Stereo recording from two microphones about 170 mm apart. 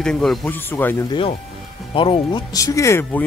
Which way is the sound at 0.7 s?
10° left (ahead or behind).